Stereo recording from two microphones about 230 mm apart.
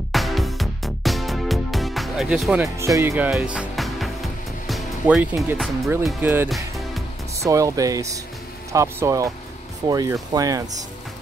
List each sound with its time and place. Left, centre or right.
0.1 s music: centre
7.4 s speech: centre